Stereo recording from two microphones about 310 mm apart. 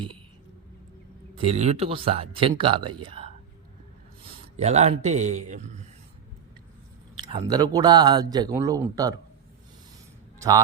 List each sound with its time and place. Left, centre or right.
1.4 s a man's voice: right
7.3 s speech: centre